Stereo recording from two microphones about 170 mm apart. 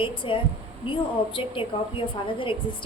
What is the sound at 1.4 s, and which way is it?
A woman's voice, 30° left (ahead or behind).